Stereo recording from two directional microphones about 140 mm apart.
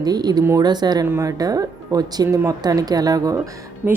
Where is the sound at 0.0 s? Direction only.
30° right (ahead or behind).